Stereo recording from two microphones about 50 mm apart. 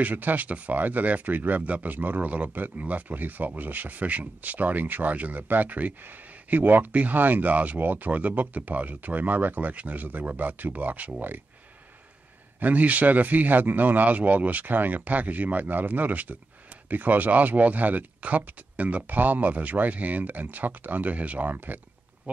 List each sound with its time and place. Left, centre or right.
0.0 s speech: right
12.5 s speech: right